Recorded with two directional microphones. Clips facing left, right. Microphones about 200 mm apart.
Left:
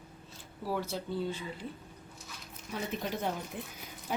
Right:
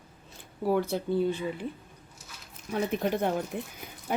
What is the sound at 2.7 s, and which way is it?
A woman's voice, 55° right (ahead or behind).